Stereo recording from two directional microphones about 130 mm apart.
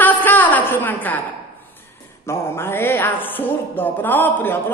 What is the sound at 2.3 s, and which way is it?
A woman's voice, 20° left (ahead or behind).